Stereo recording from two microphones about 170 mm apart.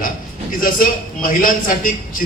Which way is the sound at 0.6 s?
55° left (ahead or behind).